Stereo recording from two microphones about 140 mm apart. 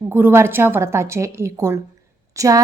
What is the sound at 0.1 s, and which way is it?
A woman's voice, 15° right (ahead or behind).